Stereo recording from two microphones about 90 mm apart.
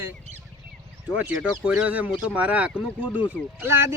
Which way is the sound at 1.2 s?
15° right (ahead or behind).